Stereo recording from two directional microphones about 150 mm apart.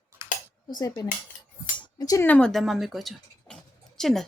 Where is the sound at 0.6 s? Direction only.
25° left (ahead or behind).